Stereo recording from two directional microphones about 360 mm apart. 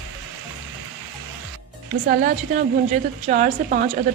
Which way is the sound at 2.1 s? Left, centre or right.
Right.